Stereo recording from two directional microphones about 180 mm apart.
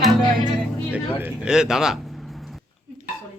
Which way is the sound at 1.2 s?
5° right (ahead or behind).